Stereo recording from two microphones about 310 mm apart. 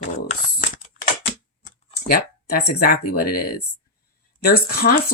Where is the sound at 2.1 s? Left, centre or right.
Left.